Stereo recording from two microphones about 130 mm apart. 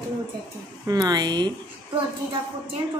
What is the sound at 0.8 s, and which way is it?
Speech, 30° right (ahead or behind).